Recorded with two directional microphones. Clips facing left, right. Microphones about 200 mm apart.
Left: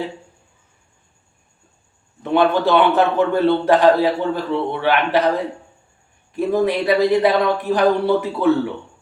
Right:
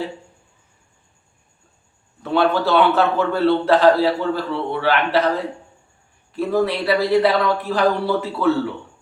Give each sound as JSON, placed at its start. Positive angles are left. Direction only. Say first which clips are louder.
{"t": 2.2, "sound": "a man's voice", "louder": "left 2 dB", "side_deg": 20}
{"t": 6.3, "sound": "a man's voice", "louder": "left 2 dB", "side_deg": 15}